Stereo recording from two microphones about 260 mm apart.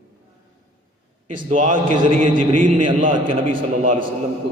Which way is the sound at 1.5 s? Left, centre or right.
Right.